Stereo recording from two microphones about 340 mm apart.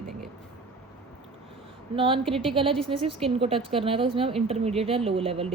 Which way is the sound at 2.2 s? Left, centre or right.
Centre.